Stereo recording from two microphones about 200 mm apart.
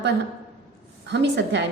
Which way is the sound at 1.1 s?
60° right (ahead or behind).